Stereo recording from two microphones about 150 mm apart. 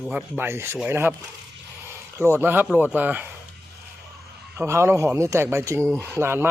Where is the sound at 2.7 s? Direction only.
10° right (ahead or behind).